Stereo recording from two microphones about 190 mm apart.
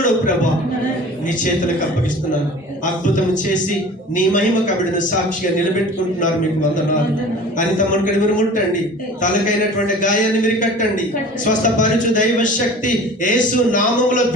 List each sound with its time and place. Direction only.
4.1 s a man's voice: 45° left (ahead or behind)
7.8 s a man's voice: 45° left (ahead or behind)
9.7 s a man's voice: 40° left (ahead or behind)